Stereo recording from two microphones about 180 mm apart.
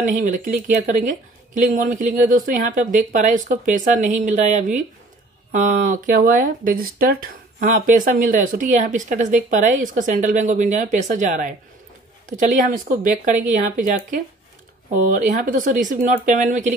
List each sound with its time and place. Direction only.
0.0 s speech: 45° right (ahead or behind)